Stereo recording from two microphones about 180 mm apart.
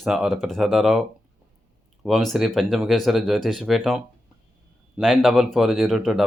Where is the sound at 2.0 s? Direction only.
Centre (ahead or behind).